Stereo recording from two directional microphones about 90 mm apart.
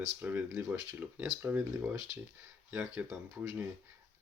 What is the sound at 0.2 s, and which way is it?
Speech, 20° right (ahead or behind).